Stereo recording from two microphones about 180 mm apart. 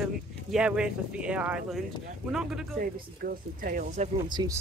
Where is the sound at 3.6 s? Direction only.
45° right (ahead or behind).